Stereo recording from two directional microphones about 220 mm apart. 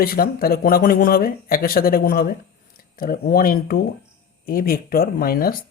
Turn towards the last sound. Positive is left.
turn(degrees=40)  # may be behind; listen again after turning